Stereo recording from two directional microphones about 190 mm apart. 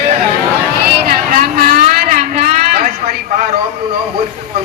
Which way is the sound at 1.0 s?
50° right (ahead or behind).